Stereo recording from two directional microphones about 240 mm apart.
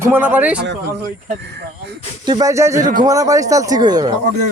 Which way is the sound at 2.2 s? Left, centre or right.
Centre.